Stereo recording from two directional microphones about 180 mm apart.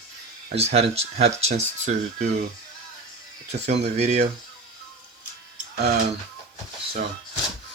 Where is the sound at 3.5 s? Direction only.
40° right (ahead or behind).